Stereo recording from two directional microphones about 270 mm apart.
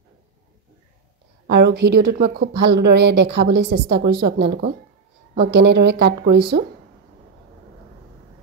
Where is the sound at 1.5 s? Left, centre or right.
Right.